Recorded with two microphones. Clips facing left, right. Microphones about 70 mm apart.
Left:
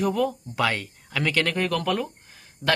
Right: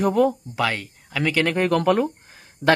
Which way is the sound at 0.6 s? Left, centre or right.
Centre.